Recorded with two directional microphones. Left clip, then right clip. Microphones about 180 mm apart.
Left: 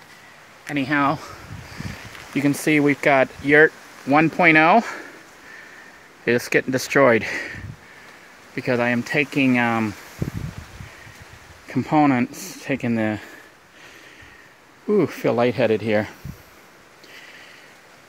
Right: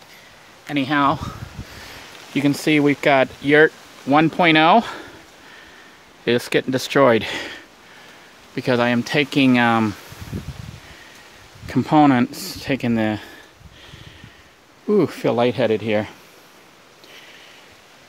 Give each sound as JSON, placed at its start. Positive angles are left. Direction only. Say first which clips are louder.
{"t": 0.7, "sound": "speech", "louder": "right 2 dB", "side_deg": -10}
{"t": 2.3, "sound": "speech", "louder": "right 1 dB", "side_deg": -10}
{"t": 6.2, "sound": "speech", "louder": "even", "side_deg": -5}
{"t": 11.6, "sound": "speech", "louder": "right 3 dB", "side_deg": -20}
{"t": 14.9, "sound": "speech", "louder": "right 1 dB", "side_deg": -10}